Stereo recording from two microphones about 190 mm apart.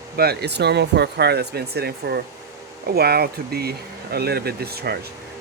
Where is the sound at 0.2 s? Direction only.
60° right (ahead or behind).